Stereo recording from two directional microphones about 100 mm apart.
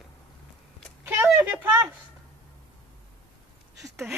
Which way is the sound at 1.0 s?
20° right (ahead or behind).